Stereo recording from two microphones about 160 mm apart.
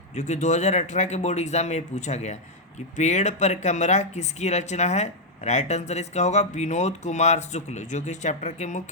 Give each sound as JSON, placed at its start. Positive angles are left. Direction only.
{"t": 0.2, "sound": "speech", "side_deg": 45}